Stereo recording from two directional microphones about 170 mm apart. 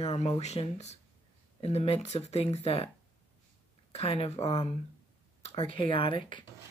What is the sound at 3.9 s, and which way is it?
Speech, 35° left (ahead or behind).